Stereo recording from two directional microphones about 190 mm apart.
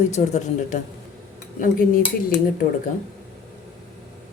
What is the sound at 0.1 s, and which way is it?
Speech, 35° left (ahead or behind).